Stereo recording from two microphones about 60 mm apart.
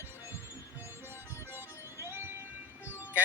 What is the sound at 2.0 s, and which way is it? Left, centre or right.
Music, right.